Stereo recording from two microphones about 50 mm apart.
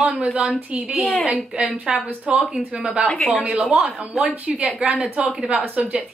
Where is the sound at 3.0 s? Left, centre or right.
Left.